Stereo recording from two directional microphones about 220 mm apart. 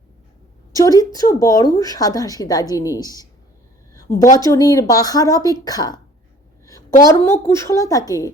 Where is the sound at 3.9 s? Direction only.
15° left (ahead or behind).